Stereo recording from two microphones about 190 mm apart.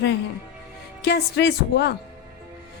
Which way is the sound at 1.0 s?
60° left (ahead or behind).